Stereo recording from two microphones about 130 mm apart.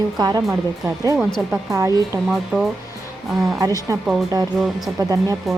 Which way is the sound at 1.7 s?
25° right (ahead or behind).